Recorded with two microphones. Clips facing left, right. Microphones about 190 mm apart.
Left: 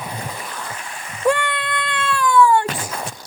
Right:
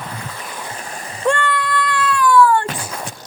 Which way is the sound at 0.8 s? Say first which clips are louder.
Left 1 dB; 40° right (ahead or behind).